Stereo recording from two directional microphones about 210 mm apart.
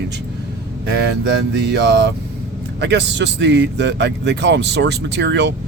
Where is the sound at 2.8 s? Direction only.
55° right (ahead or behind).